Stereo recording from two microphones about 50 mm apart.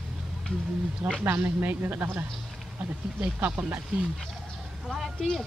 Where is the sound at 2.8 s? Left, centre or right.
Right.